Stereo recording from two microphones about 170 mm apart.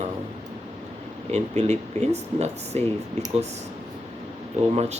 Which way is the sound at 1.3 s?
40° right (ahead or behind).